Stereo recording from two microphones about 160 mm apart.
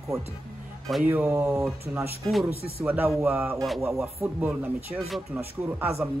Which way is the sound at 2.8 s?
10° right (ahead or behind).